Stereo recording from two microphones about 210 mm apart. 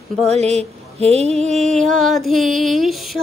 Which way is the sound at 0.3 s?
30° right (ahead or behind).